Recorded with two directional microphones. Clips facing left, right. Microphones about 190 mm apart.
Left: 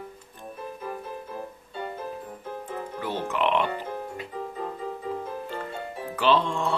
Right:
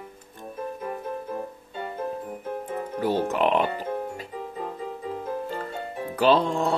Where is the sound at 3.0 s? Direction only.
40° right (ahead or behind).